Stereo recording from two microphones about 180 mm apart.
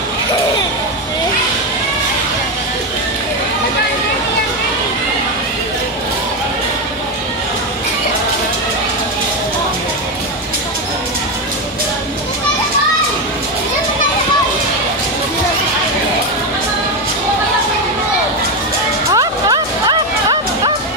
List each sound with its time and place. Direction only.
19.1 s music: 25° right (ahead or behind)